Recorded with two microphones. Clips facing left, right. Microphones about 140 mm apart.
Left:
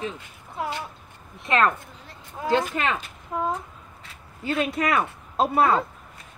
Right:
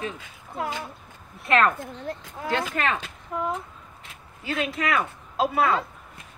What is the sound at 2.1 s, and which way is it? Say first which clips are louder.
Speech: right 14 dB; 50° right (ahead or behind).